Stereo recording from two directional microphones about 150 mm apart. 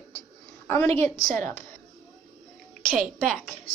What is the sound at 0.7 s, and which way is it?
Speech, 20° left (ahead or behind).